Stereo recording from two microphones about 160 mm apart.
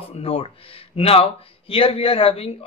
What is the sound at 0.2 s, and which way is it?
Speech, 35° left (ahead or behind).